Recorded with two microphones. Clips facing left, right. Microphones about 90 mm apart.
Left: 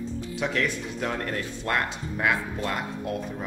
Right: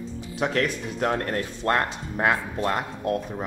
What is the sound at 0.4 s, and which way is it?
Speech, 40° right (ahead or behind).